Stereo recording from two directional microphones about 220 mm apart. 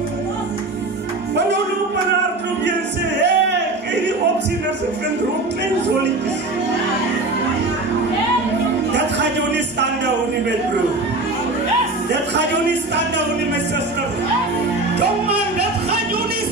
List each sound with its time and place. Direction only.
3.2 s music: 50° right (ahead or behind)
8.9 s music: 50° right (ahead or behind)
12.1 s music: 50° right (ahead or behind)